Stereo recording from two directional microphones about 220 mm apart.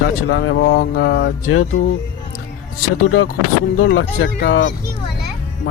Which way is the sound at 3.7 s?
65° left (ahead or behind).